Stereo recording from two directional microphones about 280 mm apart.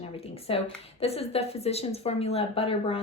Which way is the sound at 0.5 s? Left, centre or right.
Centre.